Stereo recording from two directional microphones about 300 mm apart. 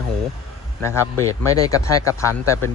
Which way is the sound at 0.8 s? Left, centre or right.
Centre.